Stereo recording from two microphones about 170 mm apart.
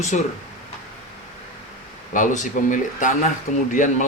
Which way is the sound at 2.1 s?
50° left (ahead or behind).